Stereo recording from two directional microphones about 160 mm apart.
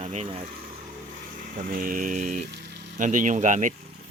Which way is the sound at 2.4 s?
90° right.